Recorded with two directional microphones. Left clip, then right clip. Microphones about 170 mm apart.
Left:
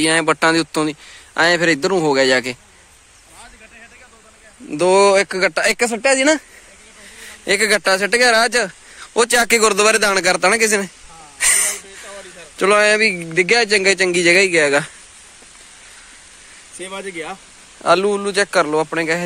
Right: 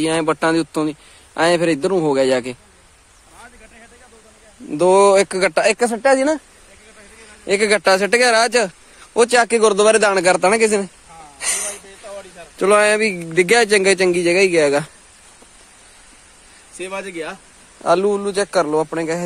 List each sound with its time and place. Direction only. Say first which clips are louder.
0.0 s a man's voice: left 3 dB; 5° left (ahead or behind)
4.6 s speech: right 1 dB; 15° right (ahead or behind)
5.8 s speech: right 1 dB; 25° left (ahead or behind)
7.4 s a man's voice: even; 5° left (ahead or behind)
9.3 s speech: left 1 dB; 10° left (ahead or behind); by 14.9 s 5° right (ahead or behind)
16.7 s speech: right 3 dB; 10° left (ahead or behind)
17.0 s speech: even; 20° left (ahead or behind)
17.8 s a man's voice: left 1 dB; 5° right (ahead or behind)